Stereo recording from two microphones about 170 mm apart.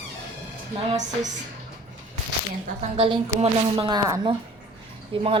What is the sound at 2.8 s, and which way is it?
A woman's voice, 35° right (ahead or behind).